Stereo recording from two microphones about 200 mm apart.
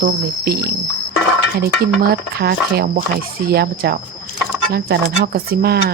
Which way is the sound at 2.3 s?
50° right (ahead or behind).